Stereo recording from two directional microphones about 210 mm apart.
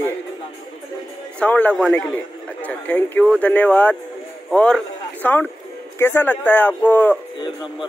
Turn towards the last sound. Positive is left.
turn(degrees=10)  # may be behind; listen again after turning